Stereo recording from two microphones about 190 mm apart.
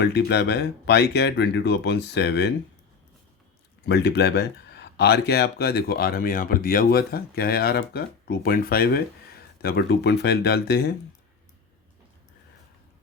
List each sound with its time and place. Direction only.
0.0 s speech: 60° left (ahead or behind)
3.8 s speech: 65° left (ahead or behind)